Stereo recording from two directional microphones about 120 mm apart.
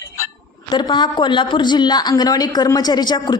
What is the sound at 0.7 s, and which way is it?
A woman's voice, 40° left (ahead or behind).